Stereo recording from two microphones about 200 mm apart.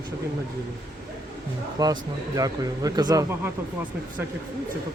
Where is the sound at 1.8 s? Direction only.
20° right (ahead or behind).